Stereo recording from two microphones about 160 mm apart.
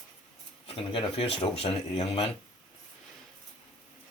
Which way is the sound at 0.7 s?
35° left (ahead or behind).